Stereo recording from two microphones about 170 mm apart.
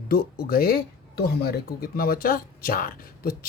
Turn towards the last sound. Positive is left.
turn(degrees=60)  # may be behind; listen again after turning